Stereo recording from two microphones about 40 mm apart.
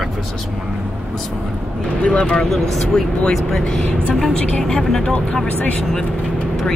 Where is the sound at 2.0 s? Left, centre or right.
Left.